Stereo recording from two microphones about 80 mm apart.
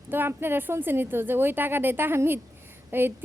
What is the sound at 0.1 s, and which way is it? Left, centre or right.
A woman's voice, right.